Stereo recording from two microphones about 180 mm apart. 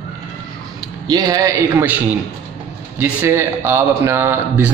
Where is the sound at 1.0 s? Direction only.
20° right (ahead or behind).